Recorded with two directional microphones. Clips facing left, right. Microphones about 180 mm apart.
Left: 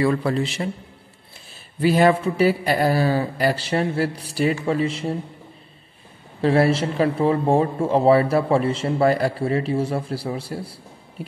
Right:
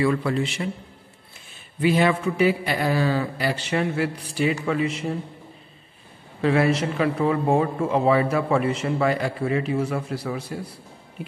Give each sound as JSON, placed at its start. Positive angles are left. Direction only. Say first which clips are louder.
{"t": 0.0, "sound": "speech", "louder": "left 2 dB", "side_deg": 40}
{"t": 6.4, "sound": "speech", "louder": "left 2 dB", "side_deg": 35}